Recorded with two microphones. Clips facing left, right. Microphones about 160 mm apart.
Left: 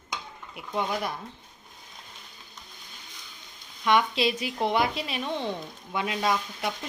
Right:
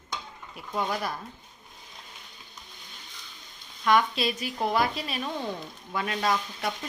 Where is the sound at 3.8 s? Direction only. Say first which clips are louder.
Even; 25° left (ahead or behind).